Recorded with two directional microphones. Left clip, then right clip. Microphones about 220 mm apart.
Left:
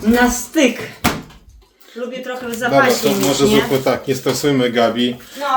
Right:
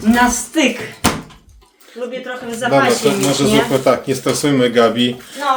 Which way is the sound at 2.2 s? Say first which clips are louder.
Left 1 dB; 5° left (ahead or behind).